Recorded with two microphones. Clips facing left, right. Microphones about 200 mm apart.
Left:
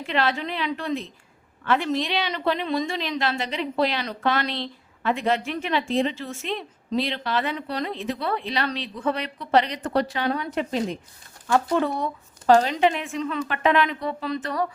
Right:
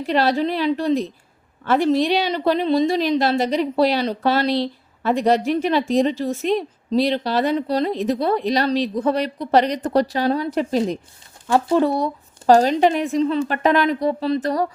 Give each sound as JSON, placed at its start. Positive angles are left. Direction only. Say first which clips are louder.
{"t": 0.0, "sound": "speech", "louder": "right 6 dB", "side_deg": -35}